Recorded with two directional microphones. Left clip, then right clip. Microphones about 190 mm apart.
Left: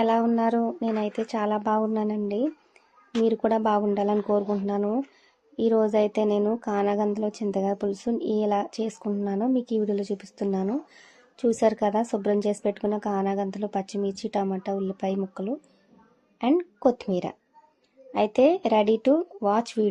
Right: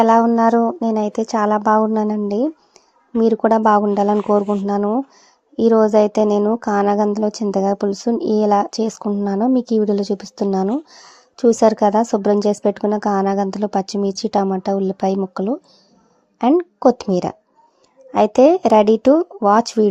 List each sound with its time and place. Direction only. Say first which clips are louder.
0.0 s speech: right 10 dB; 35° right (ahead or behind)